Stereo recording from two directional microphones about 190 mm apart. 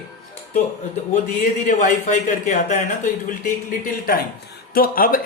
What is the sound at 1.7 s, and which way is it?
Speech, 40° left (ahead or behind).